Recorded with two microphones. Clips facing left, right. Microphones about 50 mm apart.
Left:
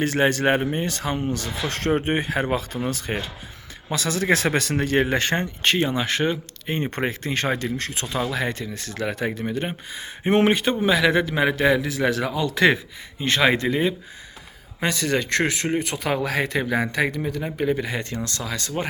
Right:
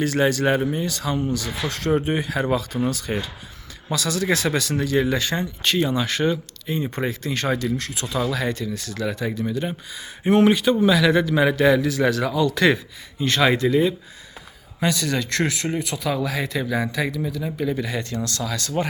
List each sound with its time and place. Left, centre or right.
0.0 s speech: left
6.7 s speech: left